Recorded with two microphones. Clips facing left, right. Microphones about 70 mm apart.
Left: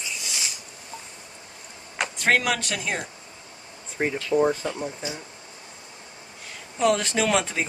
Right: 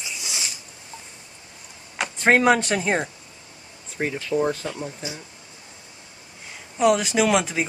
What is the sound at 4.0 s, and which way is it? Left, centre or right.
Speech, centre.